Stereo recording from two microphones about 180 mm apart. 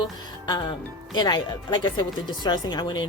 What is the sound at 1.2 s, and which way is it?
Speech, 25° left (ahead or behind).